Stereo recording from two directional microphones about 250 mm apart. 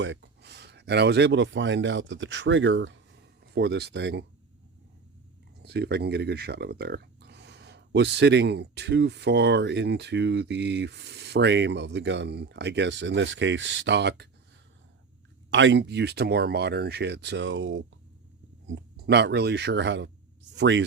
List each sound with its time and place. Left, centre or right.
0.0 s speech: right
5.6 s speech: right
15.4 s speech: right